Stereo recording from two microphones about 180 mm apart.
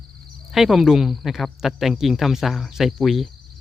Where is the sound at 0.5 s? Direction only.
Centre (ahead or behind).